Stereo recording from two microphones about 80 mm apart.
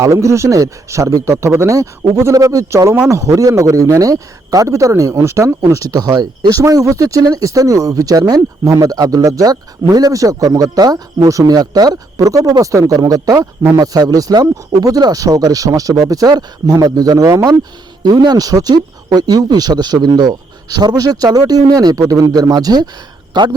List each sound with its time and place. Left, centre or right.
0.0 s a man's voice: right
6.5 s speech: right
18.0 s speech: right
23.3 s speech: right